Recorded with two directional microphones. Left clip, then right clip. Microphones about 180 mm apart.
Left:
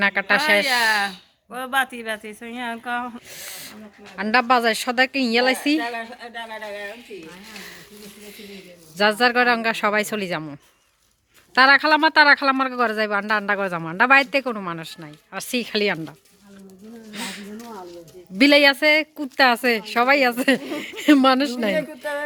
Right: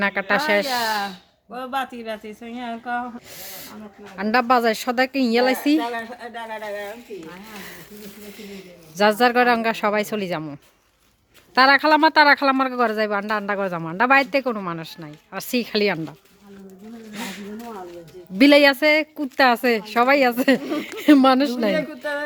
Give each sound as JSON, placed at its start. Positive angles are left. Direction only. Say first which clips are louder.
{"t": 0.0, "sound": "speech", "louder": "left 2 dB", "side_deg": 0}
{"t": 0.7, "sound": "speech", "louder": "left 4 dB", "side_deg": 20}
{"t": 3.3, "sound": "speech", "louder": "left 1 dB", "side_deg": -5}
{"t": 5.9, "sound": "speech", "louder": "right 1 dB", "side_deg": -35}
{"t": 8.4, "sound": "speech", "louder": "right 1 dB", "side_deg": -20}
{"t": 17.1, "sound": "a sound", "louder": "left 1 dB", "side_deg": 0}
{"t": 18.3, "sound": "speech", "louder": "right 1 dB", "side_deg": -10}
{"t": 21.8, "sound": "speech", "louder": "even", "side_deg": -50}